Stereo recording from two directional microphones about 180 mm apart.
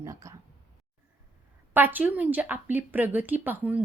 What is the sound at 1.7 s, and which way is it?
A woman's voice, 10° right (ahead or behind).